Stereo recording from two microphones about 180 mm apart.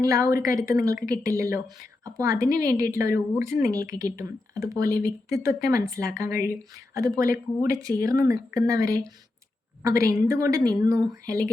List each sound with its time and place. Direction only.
0.0 s speech: 15° right (ahead or behind)